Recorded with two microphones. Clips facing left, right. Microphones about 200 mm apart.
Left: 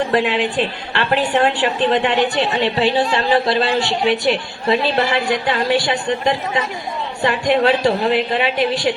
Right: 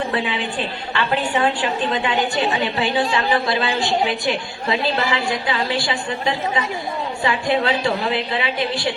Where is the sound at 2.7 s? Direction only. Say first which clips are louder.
Left 3 dB; 35° left (ahead or behind).